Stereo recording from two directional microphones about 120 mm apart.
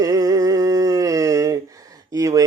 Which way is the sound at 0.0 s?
30° right (ahead or behind).